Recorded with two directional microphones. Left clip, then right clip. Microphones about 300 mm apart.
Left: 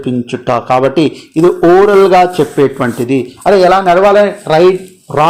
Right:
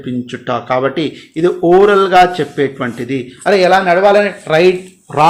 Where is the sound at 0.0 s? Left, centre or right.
Centre.